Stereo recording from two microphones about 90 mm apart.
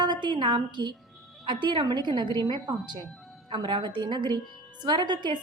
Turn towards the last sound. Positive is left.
turn(degrees=-55)  # may be behind; listen again after turning